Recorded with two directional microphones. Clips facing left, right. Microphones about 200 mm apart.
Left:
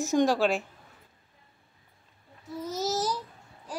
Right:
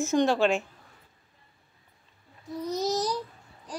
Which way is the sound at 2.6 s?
5° left (ahead or behind).